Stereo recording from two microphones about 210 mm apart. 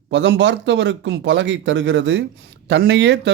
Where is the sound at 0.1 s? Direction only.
60° right (ahead or behind).